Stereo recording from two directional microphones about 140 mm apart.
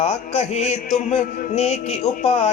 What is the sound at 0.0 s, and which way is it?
Music, 55° left (ahead or behind).